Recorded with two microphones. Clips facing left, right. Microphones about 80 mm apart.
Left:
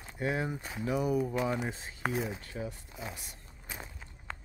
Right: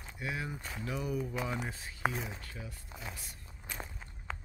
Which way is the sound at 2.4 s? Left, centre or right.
Left.